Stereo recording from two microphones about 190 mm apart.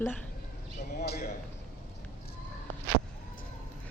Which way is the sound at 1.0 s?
55° left (ahead or behind).